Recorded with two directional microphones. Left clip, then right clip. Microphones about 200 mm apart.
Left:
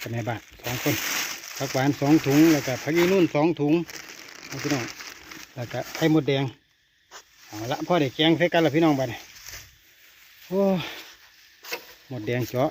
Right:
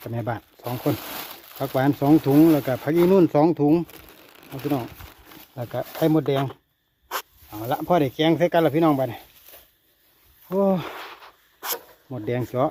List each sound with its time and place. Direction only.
0.0 s speech: 5° right (ahead or behind)
1.6 s speech: 10° right (ahead or behind)
3.2 s speech: 30° right (ahead or behind)
4.4 s speech: 10° right (ahead or behind)
10.5 s speech: centre (ahead or behind)
12.1 s speech: centre (ahead or behind)